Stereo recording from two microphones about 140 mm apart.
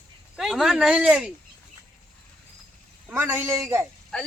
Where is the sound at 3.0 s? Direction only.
15° right (ahead or behind).